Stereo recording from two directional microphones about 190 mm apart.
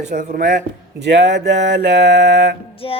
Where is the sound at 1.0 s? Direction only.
65° right (ahead or behind).